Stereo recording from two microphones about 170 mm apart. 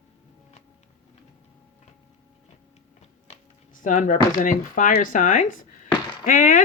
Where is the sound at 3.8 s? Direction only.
50° left (ahead or behind).